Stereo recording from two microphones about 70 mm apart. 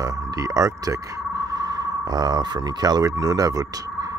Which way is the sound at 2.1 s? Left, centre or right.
Right.